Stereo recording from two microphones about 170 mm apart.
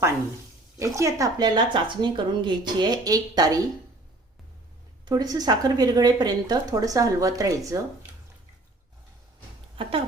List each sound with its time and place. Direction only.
0.8 s speech: 15° right (ahead or behind)
5.0 s speech: 20° right (ahead or behind)